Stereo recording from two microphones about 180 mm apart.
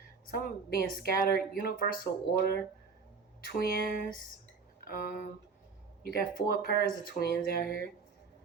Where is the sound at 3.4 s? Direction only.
55° left (ahead or behind).